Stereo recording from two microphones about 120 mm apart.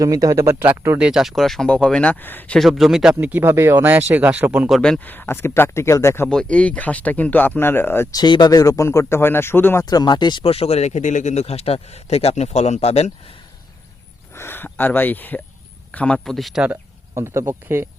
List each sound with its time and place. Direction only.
0.0 s speech: 30° right (ahead or behind)
1.0 s speech: 5° right (ahead or behind); by 2.6 s 15° left (ahead or behind)
2.6 s speech: centre (ahead or behind)
4.7 s speech: 5° left (ahead or behind); by 6.2 s 25° left (ahead or behind)
6.2 s speech: 10° left (ahead or behind)
8.1 s speech: 35° left (ahead or behind); by 9.8 s 20° left (ahead or behind)
9.8 s speech: 35° left (ahead or behind); by 13.1 s 60° left (ahead or behind)
14.3 s speech: 20° left (ahead or behind); by 16.6 s centre (ahead or behind)
17.2 s speech: 20° right (ahead or behind)